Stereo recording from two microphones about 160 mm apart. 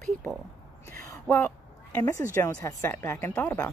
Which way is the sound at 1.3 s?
5° left (ahead or behind).